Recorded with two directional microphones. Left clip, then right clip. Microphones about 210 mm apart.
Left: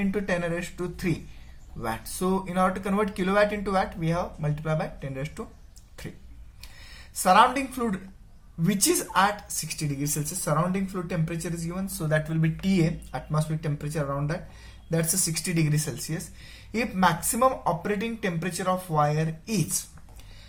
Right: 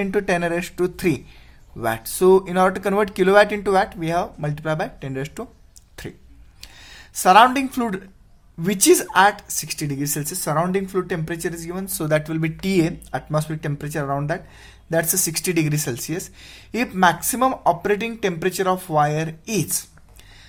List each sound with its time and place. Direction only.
0.0 s speech: 50° right (ahead or behind)
7.2 s speech: 55° right (ahead or behind)